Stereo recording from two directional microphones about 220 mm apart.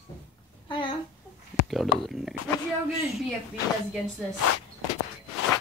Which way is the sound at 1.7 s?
Centre (ahead or behind).